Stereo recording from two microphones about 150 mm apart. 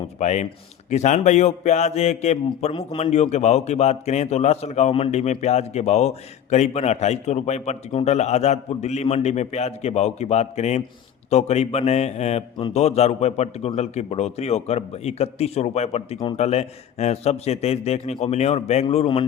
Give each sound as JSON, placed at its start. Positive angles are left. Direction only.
{"t": 0.2, "sound": "speech", "side_deg": 50}